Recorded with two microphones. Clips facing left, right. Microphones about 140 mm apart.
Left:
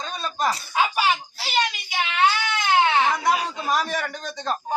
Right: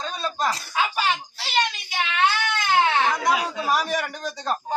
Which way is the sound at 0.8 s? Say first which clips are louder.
Left 2 dB; 10° left (ahead or behind).